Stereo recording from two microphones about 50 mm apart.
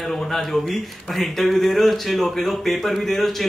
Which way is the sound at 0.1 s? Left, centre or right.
Centre.